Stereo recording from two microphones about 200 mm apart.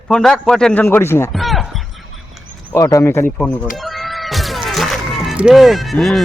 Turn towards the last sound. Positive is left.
turn(degrees=0)  # may be behind; listen again after turning